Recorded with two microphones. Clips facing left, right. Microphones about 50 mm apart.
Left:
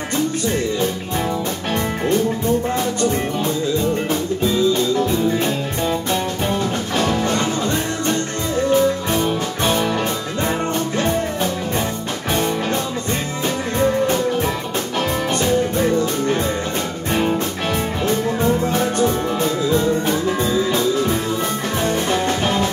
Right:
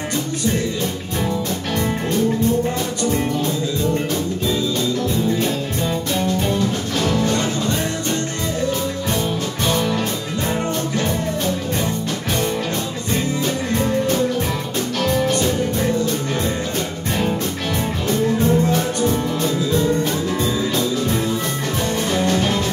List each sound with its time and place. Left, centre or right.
7.1 s music: left
18.0 s music: centre
22.1 s music: centre